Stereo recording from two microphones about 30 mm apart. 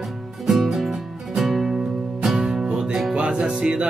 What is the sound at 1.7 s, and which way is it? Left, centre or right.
Music, right.